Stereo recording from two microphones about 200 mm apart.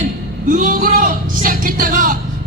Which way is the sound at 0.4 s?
40° right (ahead or behind).